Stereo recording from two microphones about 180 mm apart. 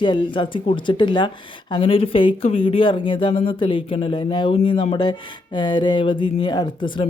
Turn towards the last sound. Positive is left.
turn(degrees=25)  # may be behind; listen again after turning